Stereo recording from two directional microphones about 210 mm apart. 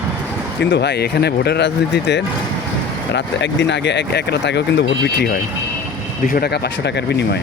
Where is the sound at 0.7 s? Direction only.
55° left (ahead or behind).